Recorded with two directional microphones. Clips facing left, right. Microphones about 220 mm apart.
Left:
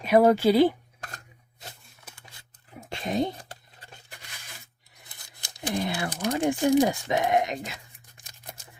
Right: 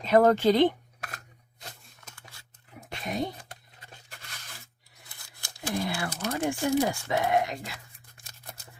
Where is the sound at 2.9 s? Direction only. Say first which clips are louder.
Left 5 dB; 25° left (ahead or behind).